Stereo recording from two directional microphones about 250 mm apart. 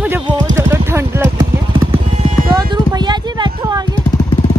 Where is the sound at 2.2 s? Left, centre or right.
Centre.